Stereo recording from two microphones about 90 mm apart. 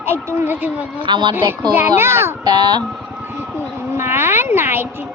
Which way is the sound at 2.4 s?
50° right (ahead or behind).